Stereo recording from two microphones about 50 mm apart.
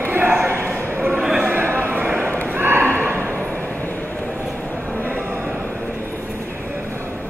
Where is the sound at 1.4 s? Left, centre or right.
Right.